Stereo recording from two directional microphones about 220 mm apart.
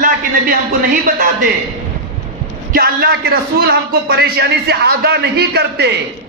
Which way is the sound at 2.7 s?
45° right (ahead or behind).